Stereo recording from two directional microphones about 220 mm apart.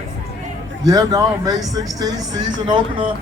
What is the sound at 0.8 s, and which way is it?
A man's voice, 15° right (ahead or behind).